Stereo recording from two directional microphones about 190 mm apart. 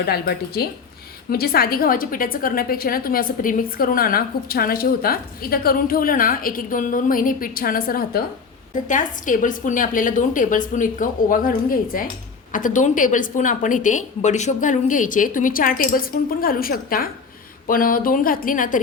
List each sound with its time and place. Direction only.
0.0 s a woman's voice: 55° left (ahead or behind)